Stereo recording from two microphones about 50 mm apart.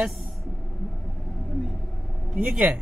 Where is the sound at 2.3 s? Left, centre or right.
Right.